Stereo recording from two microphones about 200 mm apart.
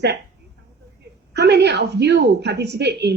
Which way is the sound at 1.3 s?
55° right (ahead or behind).